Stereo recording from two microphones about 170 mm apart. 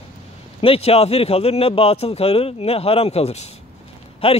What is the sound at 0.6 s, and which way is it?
A man's voice, 35° left (ahead or behind).